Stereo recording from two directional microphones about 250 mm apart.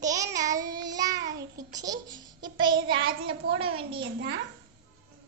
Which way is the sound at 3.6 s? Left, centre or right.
Right.